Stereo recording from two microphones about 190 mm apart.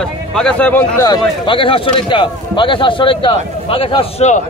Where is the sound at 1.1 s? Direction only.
25° left (ahead or behind).